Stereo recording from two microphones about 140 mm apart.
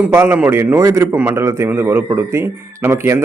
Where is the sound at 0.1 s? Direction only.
15° right (ahead or behind).